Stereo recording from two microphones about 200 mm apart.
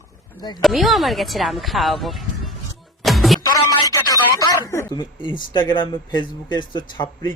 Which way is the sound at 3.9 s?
20° left (ahead or behind).